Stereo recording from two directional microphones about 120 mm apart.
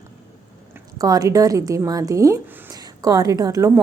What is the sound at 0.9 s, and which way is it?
A woman's voice, 30° right (ahead or behind).